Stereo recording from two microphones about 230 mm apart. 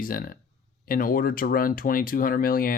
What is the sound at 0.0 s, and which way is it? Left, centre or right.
Speech, left.